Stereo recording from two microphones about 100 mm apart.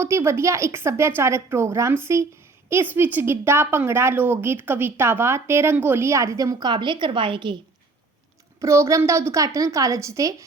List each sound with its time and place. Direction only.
0.0 s a woman's voice: 25° right (ahead or behind); by 7.5 s 55° right (ahead or behind)
8.6 s a woman's voice: 30° right (ahead or behind)